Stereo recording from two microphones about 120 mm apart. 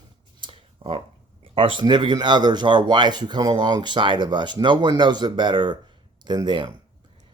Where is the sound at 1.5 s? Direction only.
45° right (ahead or behind).